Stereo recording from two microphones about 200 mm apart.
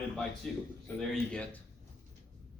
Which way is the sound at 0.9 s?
5° left (ahead or behind).